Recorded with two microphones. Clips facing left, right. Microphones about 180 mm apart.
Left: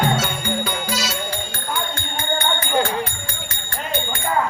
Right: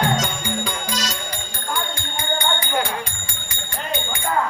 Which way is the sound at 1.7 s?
15° right (ahead or behind).